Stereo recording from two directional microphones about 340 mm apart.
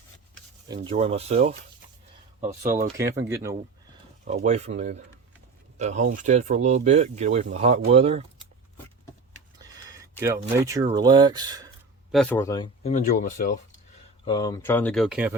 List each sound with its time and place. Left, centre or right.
0.7 s speech: centre
3.0 s speech: centre
4.3 s speech: centre
10.2 s speech: centre
12.1 s speech: centre; by 13.6 s left
14.3 s speech: centre